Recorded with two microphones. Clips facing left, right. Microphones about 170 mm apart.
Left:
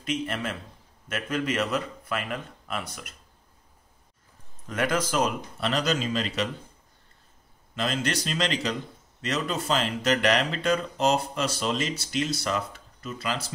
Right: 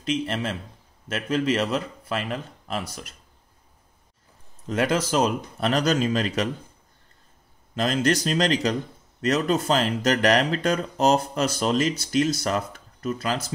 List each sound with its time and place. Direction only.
0.0 s speech: 30° right (ahead or behind)
4.6 s speech: 30° right (ahead or behind); by 6.5 s 45° right (ahead or behind)
7.7 s speech: 40° right (ahead or behind)